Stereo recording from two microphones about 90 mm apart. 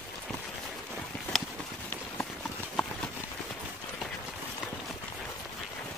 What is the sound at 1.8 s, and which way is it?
Clip-clop, 20° left (ahead or behind).